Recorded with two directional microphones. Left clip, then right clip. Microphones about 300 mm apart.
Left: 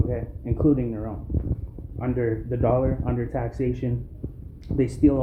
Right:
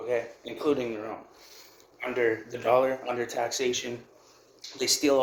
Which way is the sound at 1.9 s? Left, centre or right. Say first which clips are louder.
Even; right.